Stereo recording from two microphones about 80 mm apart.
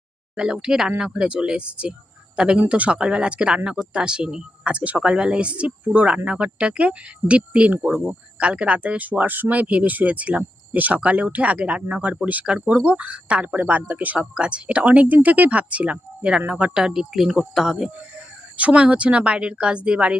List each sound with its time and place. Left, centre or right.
0.3 s speech: centre
18.5 s speech: centre